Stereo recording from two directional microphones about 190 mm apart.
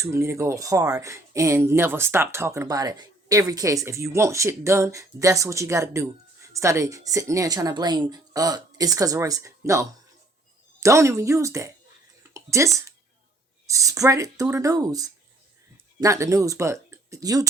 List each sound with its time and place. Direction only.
0.0 s speech: 15° right (ahead or behind)